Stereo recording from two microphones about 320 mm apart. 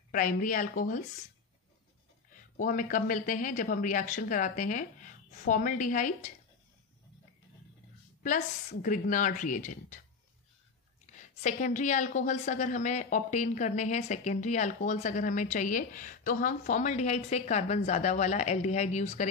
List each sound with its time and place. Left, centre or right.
0.1 s a woman's voice: left
2.5 s a woman's voice: left
8.8 s a woman's voice: left
11.1 s a woman's voice: left